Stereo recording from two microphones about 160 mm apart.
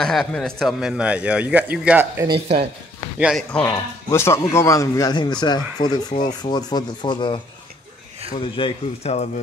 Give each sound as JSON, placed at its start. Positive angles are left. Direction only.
{"t": 0.0, "sound": "a man's voice", "side_deg": 5}
{"t": 2.2, "sound": "speech", "side_deg": -35}
{"t": 3.2, "sound": "speech", "side_deg": -5}
{"t": 3.5, "sound": "a man's voice", "side_deg": 15}
{"t": 6.1, "sound": "speech", "side_deg": 55}
{"t": 6.5, "sound": "a man's voice", "side_deg": 25}
{"t": 8.4, "sound": "speech", "side_deg": 30}